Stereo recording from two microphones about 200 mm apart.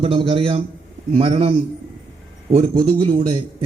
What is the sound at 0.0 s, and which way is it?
A man's voice, 30° right (ahead or behind).